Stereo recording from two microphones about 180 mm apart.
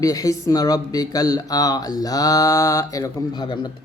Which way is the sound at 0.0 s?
20° left (ahead or behind).